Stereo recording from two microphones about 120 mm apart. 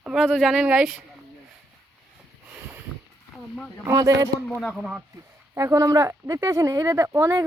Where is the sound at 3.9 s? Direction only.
30° right (ahead or behind).